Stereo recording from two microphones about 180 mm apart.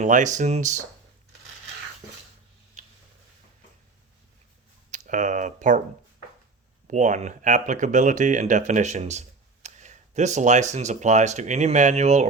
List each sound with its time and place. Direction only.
0.0 s speech: 45° right (ahead or behind)
2.8 s a sound: 45° right (ahead or behind)
4.9 s speech: 45° right (ahead or behind)
6.8 s speech: 40° right (ahead or behind)